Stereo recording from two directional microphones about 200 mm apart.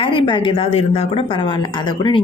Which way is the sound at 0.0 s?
25° left (ahead or behind).